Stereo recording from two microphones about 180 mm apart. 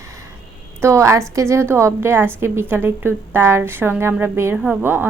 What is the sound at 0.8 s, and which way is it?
A woman's voice, 15° right (ahead or behind).